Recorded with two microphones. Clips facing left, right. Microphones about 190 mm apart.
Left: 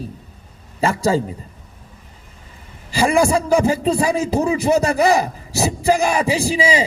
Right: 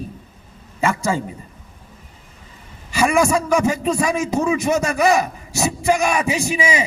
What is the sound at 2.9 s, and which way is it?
A man's voice, 35° left (ahead or behind).